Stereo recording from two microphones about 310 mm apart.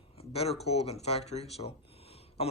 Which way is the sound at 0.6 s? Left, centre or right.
Centre.